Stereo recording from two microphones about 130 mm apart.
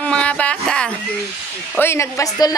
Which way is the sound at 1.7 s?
20° left (ahead or behind).